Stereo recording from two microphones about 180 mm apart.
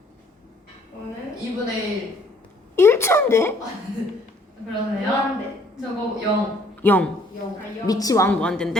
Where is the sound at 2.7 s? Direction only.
15° left (ahead or behind).